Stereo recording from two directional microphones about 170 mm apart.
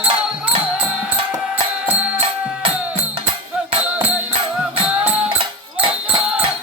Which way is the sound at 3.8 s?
10° right (ahead or behind).